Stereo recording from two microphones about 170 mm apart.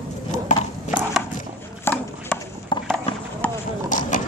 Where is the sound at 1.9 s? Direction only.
15° left (ahead or behind).